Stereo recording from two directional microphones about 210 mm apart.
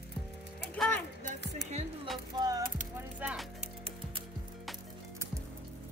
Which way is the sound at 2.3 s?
15° right (ahead or behind).